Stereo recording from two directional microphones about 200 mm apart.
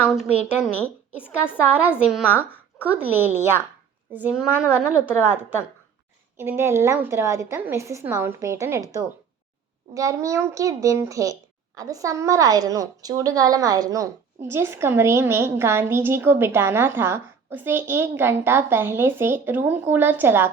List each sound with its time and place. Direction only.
0.1 s a woman's voice: centre (ahead or behind)